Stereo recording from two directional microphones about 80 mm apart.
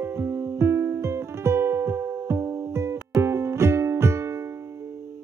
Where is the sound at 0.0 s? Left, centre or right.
Right.